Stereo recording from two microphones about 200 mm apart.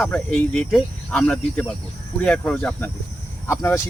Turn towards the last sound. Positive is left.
turn(degrees=15)  # may be behind; listen again after turning